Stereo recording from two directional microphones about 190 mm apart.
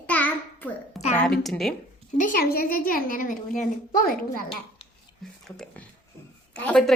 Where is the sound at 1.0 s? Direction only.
35° left (ahead or behind).